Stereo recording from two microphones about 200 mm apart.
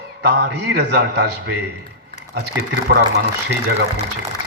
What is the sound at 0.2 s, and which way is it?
A man's voice, 55° right (ahead or behind).